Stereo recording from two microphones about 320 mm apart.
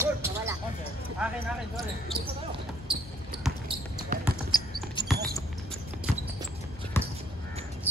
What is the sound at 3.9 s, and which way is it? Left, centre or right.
Basketball bounce, right.